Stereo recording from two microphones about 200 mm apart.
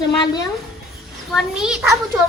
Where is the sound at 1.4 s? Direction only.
5° right (ahead or behind).